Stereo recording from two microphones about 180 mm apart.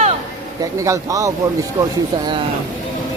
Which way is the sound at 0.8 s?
15° right (ahead or behind).